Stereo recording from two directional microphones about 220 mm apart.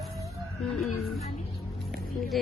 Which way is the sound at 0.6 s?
Centre (ahead or behind).